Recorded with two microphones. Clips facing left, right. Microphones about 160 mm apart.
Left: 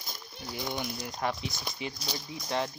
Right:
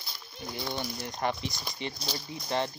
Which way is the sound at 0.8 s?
Centre (ahead or behind).